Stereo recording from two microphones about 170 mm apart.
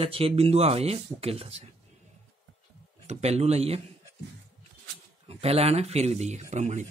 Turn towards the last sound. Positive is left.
turn(degrees=-45)  # may be behind; listen again after turning